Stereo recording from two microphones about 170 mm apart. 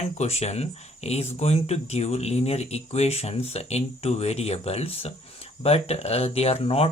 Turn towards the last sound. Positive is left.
turn(degrees=35)  # may be behind; listen again after turning